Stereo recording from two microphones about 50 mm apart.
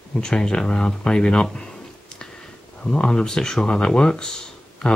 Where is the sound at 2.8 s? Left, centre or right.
Centre.